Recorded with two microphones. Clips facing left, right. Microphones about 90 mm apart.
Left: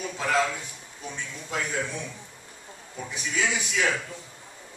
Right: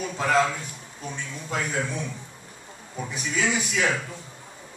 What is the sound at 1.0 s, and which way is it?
A man's voice, 10° right (ahead or behind).